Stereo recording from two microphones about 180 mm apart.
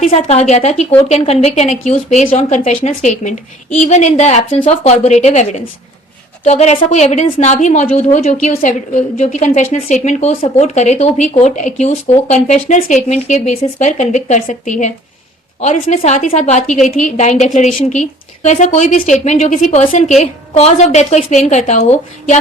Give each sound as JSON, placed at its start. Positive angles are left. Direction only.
{"t": 0.0, "sound": "speech", "side_deg": 35}